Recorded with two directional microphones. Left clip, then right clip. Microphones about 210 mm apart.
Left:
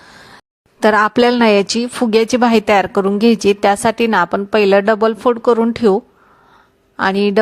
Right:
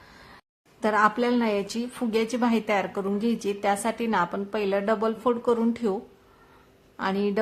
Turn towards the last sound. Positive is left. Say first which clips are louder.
# left 12 dB
turn(degrees=40)  # may be behind; listen again after turning